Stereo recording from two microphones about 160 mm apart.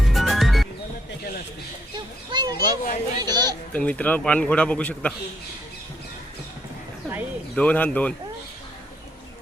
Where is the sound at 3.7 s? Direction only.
10° left (ahead or behind).